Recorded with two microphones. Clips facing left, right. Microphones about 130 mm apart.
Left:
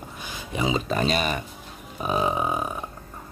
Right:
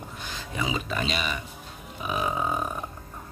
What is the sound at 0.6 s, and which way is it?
Speech, 30° left (ahead or behind).